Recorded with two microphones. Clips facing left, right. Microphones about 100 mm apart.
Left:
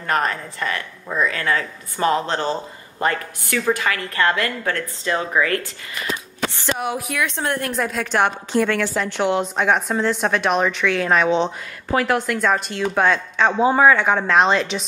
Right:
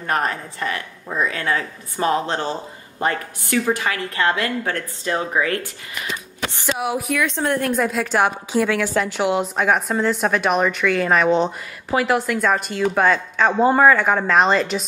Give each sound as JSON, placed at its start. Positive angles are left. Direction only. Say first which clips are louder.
{"t": 0.0, "sound": "a woman's voice", "louder": "left 1 dB", "side_deg": -20}
{"t": 6.7, "sound": "a woman's voice", "louder": "right 3 dB", "side_deg": 0}